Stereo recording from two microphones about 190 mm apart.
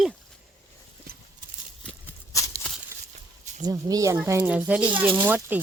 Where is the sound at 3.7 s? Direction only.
20° right (ahead or behind).